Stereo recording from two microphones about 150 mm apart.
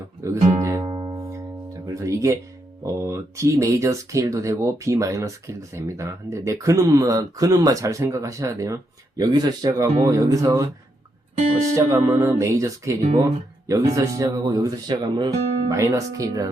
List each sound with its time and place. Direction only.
0.2 s music: 20° right (ahead or behind)
0.9 s music: 35° right (ahead or behind)
1.3 s music: 20° right (ahead or behind)
2.8 s speech: 20° right (ahead or behind)
11.7 s speech: 20° right (ahead or behind)